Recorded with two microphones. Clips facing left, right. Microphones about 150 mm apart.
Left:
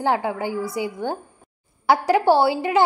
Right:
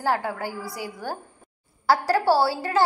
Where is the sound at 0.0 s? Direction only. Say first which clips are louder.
Left 4 dB; 20° left (ahead or behind).